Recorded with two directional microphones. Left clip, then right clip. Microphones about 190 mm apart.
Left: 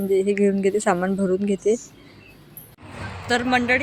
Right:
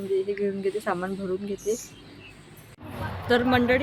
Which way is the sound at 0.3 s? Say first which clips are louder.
Left 7 dB; 35° left (ahead or behind).